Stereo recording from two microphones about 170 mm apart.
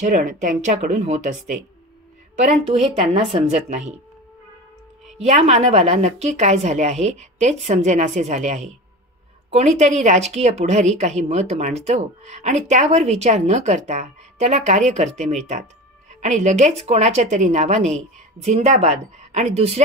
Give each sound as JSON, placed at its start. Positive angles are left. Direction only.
{"t": 0.0, "sound": "speech", "side_deg": -45}
{"t": 2.6, "sound": "speech", "side_deg": -35}
{"t": 5.2, "sound": "speech", "side_deg": -40}